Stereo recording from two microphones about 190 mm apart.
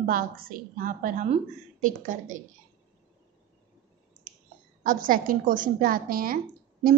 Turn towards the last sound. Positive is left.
turn(degrees=-50)  # may be behind; listen again after turning